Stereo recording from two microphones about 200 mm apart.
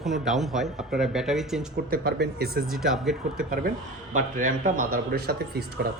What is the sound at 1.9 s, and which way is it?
Speech, 50° right (ahead or behind).